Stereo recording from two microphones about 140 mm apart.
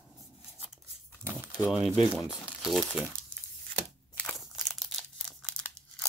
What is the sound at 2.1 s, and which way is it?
Speech, 5° right (ahead or behind).